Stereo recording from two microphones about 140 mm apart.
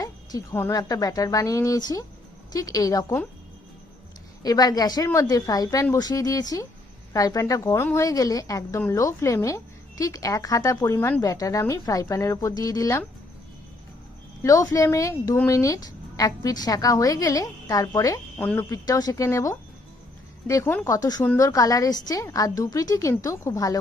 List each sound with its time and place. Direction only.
0.0 s a sound: 25° left (ahead or behind)
0.5 s speech: 15° left (ahead or behind)
0.8 s a woman's voice: 25° left (ahead or behind)
4.4 s a woman's voice: 25° left (ahead or behind)
14.4 s a woman's voice: 25° left (ahead or behind)
18.3 s speech: 15° left (ahead or behind)
18.7 s a woman's voice: 25° left (ahead or behind)